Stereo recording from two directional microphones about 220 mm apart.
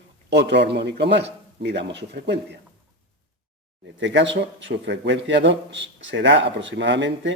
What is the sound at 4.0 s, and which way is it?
A man's voice, 55° right (ahead or behind).